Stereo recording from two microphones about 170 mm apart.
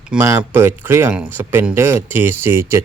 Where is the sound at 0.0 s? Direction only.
5° right (ahead or behind).